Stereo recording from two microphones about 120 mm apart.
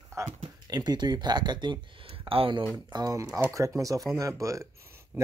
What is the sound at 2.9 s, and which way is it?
Speech, 30° right (ahead or behind).